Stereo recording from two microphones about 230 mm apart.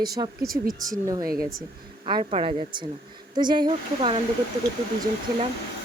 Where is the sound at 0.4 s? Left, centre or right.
Right.